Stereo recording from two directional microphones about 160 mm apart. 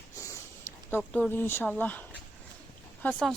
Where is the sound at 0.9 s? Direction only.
10° left (ahead or behind).